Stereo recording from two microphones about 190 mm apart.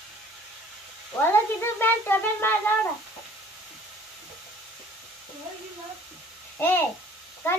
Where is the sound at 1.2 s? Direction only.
10° left (ahead or behind).